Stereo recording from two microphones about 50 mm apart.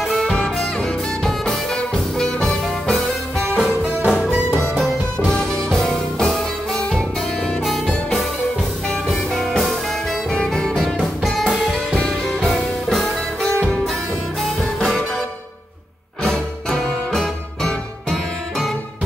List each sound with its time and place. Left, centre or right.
0.0 s music: centre
3.5 s music: centre
4.7 s music: centre
8.8 s music: centre
10.3 s music: centre
10.8 s music: centre
12.0 s music: centre
14.8 s music: centre
16.2 s music: centre